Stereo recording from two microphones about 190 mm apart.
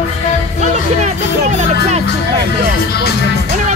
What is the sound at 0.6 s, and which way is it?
Speech, 40° right (ahead or behind).